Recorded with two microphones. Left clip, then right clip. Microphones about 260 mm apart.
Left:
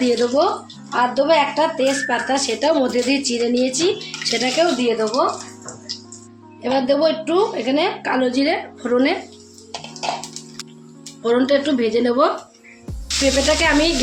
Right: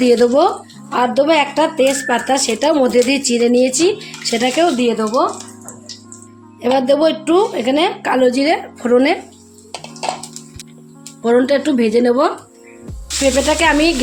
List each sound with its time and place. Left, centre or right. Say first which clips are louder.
0.0 s speech: right 5 dB; right
6.6 s speech: right 4 dB; right
11.2 s speech: right 3 dB; right